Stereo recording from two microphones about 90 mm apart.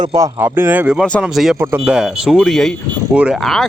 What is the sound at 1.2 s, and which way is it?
Speech, 5° right (ahead or behind).